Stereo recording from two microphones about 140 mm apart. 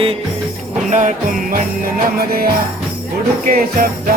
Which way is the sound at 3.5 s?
90° right.